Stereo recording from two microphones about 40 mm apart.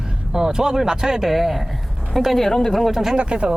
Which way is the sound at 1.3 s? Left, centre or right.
Centre.